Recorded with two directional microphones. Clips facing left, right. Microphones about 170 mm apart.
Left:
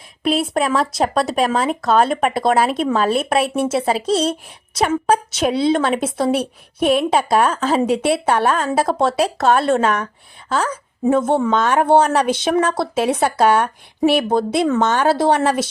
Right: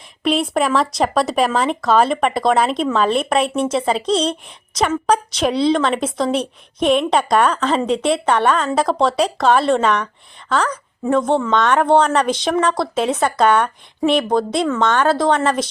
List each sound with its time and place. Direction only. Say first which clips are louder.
0.2 s a woman's voice: right 1 dB; 5° left (ahead or behind)